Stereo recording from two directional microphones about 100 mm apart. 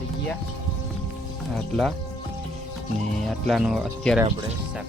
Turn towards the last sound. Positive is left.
turn(degrees=0)  # may be behind; listen again after turning